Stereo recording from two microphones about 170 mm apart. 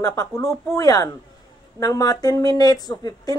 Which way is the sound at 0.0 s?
20° left (ahead or behind).